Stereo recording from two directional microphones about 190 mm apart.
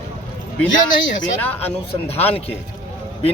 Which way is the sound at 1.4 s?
10° left (ahead or behind).